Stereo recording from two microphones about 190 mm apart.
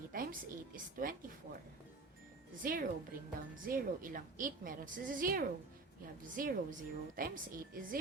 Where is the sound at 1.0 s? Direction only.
45° right (ahead or behind).